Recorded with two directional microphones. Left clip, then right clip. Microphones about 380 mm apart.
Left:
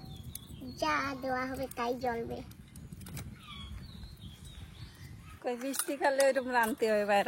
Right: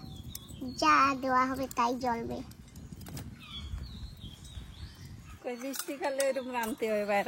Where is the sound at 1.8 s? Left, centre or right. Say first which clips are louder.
Right 4 dB; right.